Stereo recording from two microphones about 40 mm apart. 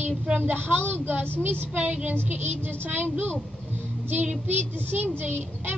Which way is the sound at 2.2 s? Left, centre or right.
Right.